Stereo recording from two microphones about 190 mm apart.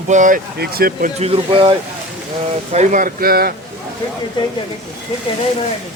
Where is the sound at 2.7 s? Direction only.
40° right (ahead or behind).